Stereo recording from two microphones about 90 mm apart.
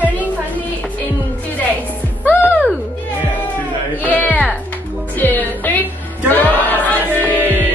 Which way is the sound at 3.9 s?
20° left (ahead or behind).